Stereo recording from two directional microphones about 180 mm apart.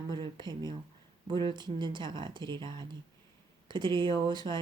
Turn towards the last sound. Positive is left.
turn(degrees=-25)  # may be behind; listen again after turning